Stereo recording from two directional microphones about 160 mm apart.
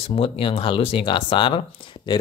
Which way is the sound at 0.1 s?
35° left (ahead or behind).